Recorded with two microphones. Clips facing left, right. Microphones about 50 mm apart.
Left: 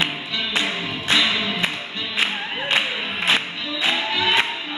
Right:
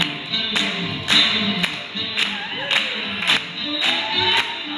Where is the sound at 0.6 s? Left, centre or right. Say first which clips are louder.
Even; centre.